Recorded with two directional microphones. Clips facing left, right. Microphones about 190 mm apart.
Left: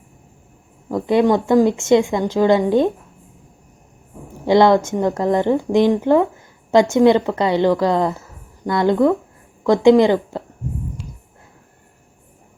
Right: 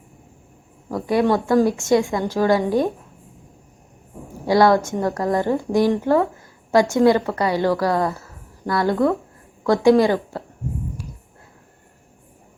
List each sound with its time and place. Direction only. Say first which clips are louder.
0.9 s a woman's voice: left 3 dB; 20° left (ahead or behind)
4.4 s a woman's voice: left 3 dB; 20° left (ahead or behind)